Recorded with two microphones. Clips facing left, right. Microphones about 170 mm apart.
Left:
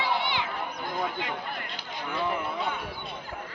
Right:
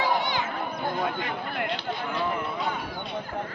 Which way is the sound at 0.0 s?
45° right (ahead or behind).